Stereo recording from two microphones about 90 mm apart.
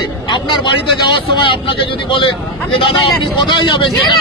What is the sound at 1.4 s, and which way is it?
Speech, 80° left.